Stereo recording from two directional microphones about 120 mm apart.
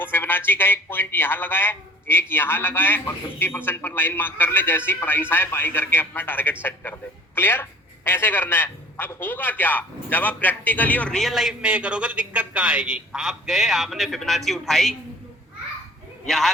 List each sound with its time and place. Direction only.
0.0 s a man's voice: 20° left (ahead or behind); by 14.9 s centre (ahead or behind)
16.2 s speech: centre (ahead or behind)